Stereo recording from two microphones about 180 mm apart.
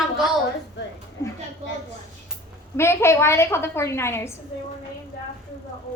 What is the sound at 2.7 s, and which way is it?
A woman's voice, 15° left (ahead or behind).